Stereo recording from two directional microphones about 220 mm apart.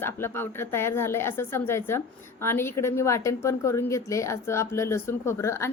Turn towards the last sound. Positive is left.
turn(degrees=10)  # may be behind; listen again after turning